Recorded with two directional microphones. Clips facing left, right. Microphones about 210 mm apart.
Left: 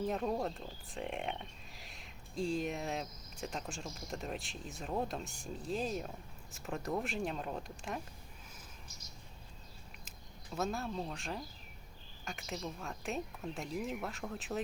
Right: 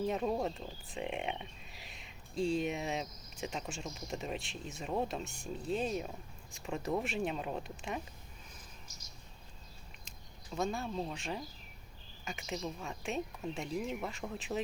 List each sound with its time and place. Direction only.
0.0 s speech: centre (ahead or behind)
10.1 s speech: 5° left (ahead or behind)